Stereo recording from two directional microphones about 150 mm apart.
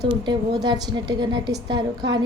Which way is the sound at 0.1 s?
30° right (ahead or behind).